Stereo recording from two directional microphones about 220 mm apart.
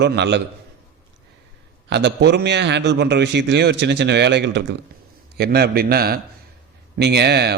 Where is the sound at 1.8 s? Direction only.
50° right (ahead or behind).